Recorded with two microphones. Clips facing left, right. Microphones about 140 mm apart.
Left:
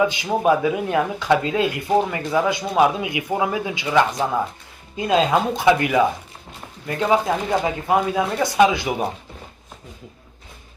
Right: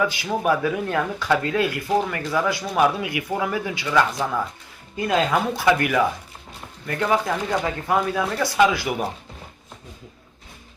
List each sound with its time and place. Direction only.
0.0 s speech: 20° left (ahead or behind)